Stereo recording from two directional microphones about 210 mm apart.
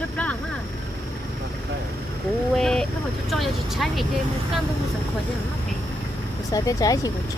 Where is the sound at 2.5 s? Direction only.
5° left (ahead or behind).